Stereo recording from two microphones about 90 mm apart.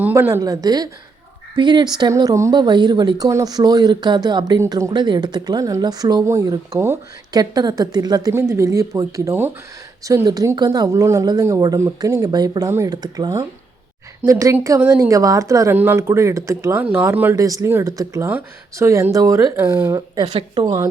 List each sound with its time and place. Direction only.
0.0 s speech: 20° right (ahead or behind)
0.4 s speech: 45° right (ahead or behind)
1.5 s speech: 55° right (ahead or behind); by 2.5 s 40° right (ahead or behind)
2.5 s speech: 50° right (ahead or behind)
6.2 s speech: 35° right (ahead or behind)
7.3 s speech: 45° right (ahead or behind)
8.3 s speech: 35° right (ahead or behind)
10.2 s speech: 45° right (ahead or behind)
12.6 s speech: 35° right (ahead or behind)
14.3 s speech: 35° right (ahead or behind)
15.7 s speech: 25° right (ahead or behind)
17.3 s speech: 40° right (ahead or behind)
18.3 s speech: 25° right (ahead or behind)
19.1 s speech: 40° right (ahead or behind)